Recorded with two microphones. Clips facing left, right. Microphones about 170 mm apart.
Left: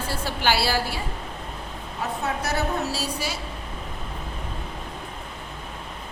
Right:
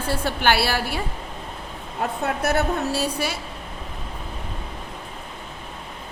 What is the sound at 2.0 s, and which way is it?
A woman's voice, 55° right (ahead or behind).